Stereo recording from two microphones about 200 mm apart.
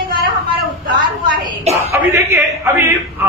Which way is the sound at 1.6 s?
35° right (ahead or behind).